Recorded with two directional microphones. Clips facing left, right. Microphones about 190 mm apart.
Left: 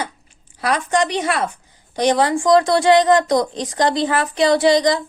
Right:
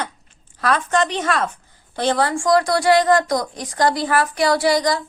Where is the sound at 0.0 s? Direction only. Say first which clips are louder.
Left 1 dB; 10° left (ahead or behind).